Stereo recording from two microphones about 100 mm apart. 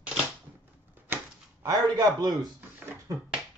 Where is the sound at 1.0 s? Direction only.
20° right (ahead or behind).